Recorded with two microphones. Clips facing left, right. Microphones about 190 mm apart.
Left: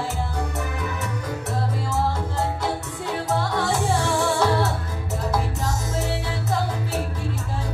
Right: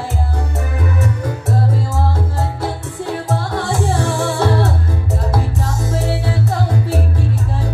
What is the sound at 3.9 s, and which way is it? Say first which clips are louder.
Music: right 3 dB; 55° right (ahead or behind).